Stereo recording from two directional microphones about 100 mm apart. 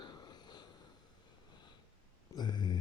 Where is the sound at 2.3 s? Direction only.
45° left (ahead or behind).